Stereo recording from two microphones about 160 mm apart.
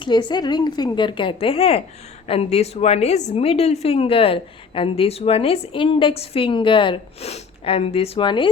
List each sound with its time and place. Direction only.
0.0 s a woman's voice: 30° left (ahead or behind)